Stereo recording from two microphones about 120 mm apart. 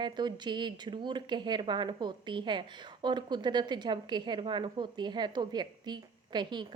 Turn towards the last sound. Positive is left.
turn(degrees=-40)  # may be behind; listen again after turning